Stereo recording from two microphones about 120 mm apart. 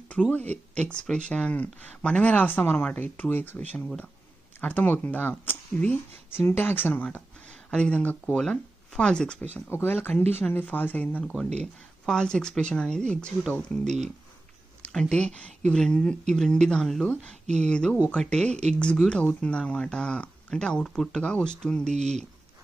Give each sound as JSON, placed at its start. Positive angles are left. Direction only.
{"t": 0.1, "sound": "speech", "side_deg": 10}
{"t": 9.7, "sound": "a woman's voice", "side_deg": 20}